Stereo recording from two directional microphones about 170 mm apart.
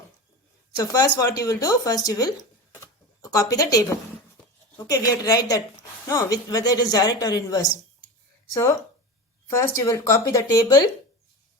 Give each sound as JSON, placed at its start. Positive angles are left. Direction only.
{"t": 0.8, "sound": "a woman's voice", "side_deg": 20}
{"t": 2.8, "sound": "a sound", "side_deg": 20}
{"t": 4.9, "sound": "a woman's voice", "side_deg": 20}
{"t": 9.5, "sound": "speech", "side_deg": 15}